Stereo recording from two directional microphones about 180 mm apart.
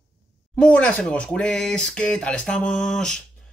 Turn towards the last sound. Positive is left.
turn(degrees=5)  # may be behind; listen again after turning